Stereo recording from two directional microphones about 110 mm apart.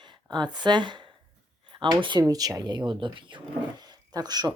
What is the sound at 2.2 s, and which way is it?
Speech, 35° right (ahead or behind).